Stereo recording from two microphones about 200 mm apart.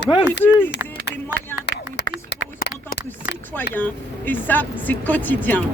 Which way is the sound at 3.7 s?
10° left (ahead or behind).